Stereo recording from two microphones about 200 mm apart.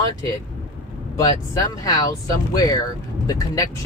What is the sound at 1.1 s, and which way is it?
Speech, 15° left (ahead or behind).